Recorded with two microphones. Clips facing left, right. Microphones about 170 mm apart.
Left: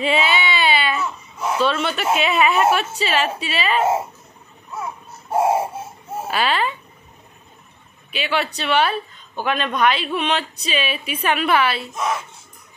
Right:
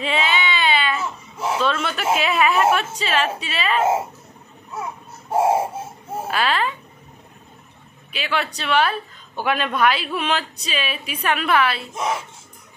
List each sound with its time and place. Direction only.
0.0 s baby cry: 5° left (ahead or behind)
1.6 s a woman's voice: centre (ahead or behind)
6.2 s a child's voice: centre (ahead or behind)
8.1 s a woman's voice: centre (ahead or behind)
11.9 s speech: 25° right (ahead or behind)